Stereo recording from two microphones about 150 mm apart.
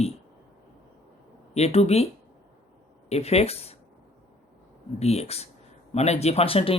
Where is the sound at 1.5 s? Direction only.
45° left (ahead or behind).